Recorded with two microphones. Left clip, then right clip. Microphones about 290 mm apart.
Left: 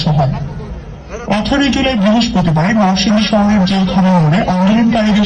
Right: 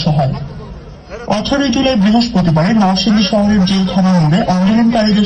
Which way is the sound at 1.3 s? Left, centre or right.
Right.